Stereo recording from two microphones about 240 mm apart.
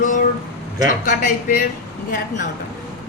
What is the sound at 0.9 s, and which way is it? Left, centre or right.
Speech, left.